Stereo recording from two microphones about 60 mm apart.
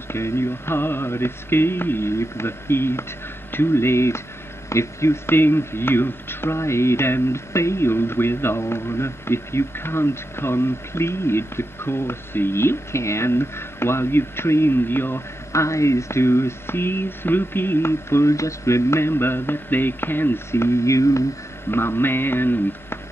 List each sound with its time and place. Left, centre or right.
0.1 s speech: left
15.5 s speech: left
21.6 s speech: left